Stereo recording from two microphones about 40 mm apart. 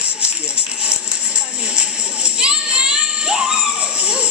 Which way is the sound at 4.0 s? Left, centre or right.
Right.